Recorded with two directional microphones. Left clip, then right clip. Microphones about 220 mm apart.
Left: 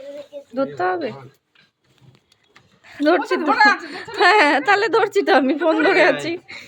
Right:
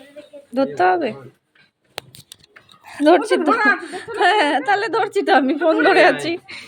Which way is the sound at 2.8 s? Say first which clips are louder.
Right 2 dB; 5° left (ahead or behind).